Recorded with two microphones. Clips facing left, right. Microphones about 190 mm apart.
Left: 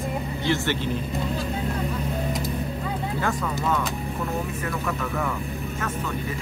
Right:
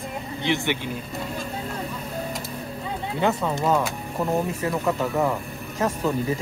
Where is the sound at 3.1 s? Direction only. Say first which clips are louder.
Right 6 dB; 20° right (ahead or behind).